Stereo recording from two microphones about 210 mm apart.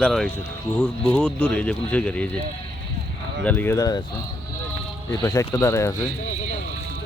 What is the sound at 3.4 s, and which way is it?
Speech, 10° left (ahead or behind).